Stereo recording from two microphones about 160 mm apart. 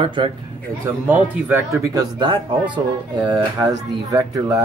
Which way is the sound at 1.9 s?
30° right (ahead or behind).